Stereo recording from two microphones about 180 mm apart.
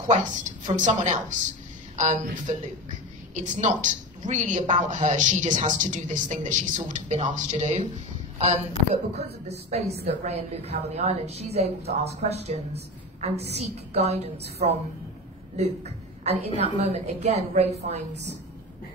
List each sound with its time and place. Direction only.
0.1 s a woman's voice: 45° right (ahead or behind)